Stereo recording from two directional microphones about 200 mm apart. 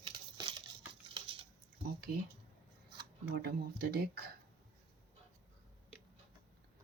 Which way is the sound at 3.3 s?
50° right (ahead or behind).